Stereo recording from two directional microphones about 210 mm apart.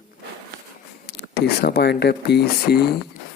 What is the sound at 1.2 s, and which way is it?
Speech, 50° left (ahead or behind).